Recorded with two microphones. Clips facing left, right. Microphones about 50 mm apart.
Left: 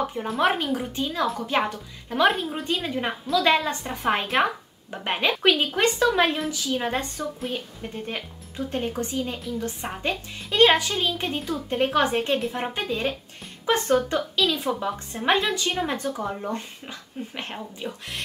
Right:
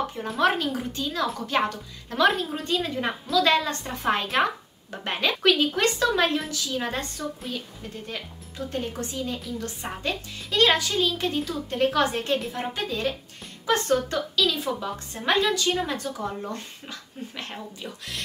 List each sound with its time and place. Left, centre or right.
0.2 s a woman's voice: left
1.6 s a woman's voice: centre
3.4 s speech: centre
3.8 s a woman's voice: centre
7.5 s speech: left